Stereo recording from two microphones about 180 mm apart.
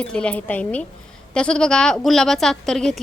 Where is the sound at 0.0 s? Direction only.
5° left (ahead or behind).